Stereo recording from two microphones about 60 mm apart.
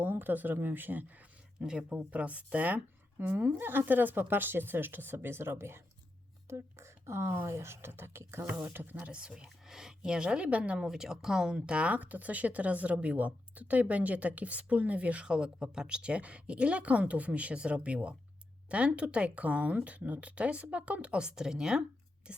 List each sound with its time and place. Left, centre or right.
0.0 s speech: right
1.6 s speech: centre
2.0 s a woman's voice: right
8.6 s a woman's voice: right
9.1 s speech: centre